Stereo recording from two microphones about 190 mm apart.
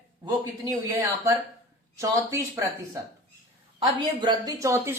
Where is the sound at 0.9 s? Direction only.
15° right (ahead or behind).